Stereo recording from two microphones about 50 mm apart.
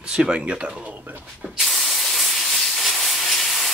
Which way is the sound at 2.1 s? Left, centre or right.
Centre.